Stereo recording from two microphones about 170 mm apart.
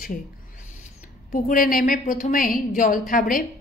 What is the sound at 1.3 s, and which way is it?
A woman's voice, 55° left (ahead or behind).